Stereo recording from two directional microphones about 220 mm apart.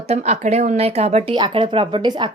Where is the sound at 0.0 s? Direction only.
30° right (ahead or behind).